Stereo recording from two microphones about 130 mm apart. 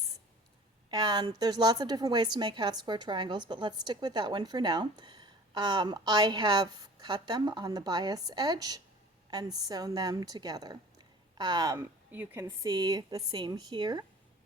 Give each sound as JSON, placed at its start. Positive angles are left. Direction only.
{"t": 0.9, "sound": "a woman's voice", "side_deg": -30}
{"t": 12.1, "sound": "a woman's voice", "side_deg": -15}